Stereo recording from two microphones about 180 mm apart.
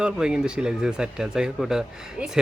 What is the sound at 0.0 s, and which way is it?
Speech, 5° right (ahead or behind).